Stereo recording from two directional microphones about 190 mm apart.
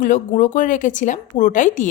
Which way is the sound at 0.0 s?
45° left (ahead or behind).